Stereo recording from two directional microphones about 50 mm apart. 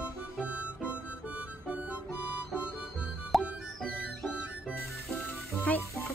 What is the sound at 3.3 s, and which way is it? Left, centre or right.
Music, centre.